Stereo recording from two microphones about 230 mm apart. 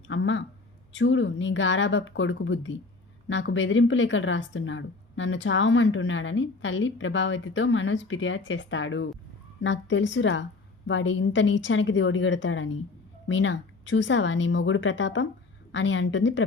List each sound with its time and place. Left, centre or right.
0.1 s speech: left